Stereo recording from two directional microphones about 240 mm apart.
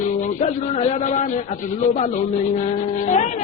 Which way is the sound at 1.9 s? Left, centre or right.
Left.